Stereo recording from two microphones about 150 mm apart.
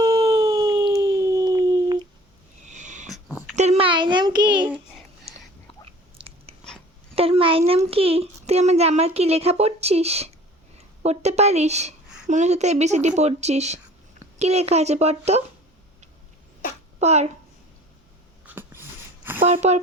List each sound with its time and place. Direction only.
0.2 s howl: 25° right (ahead or behind)
2.6 s sniff: 55° right (ahead or behind)
3.1 s a sound: 5° right (ahead or behind)
3.5 s a sound: 50° right (ahead or behind); by 4.4 s 30° right (ahead or behind)
4.4 s a child's voice: 10° right (ahead or behind)
6.1 s biting: 40° right (ahead or behind)
7.2 s a child's voice: 40° right (ahead or behind)
17.0 s a woman's voice: 50° right (ahead or behind)
18.4 s a sound: 15° right (ahead or behind)